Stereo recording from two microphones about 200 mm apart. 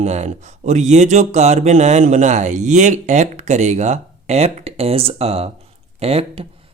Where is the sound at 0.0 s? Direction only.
35° right (ahead or behind).